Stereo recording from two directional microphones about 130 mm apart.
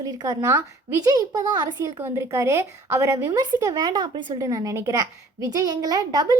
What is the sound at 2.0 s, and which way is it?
Speech, 20° right (ahead or behind).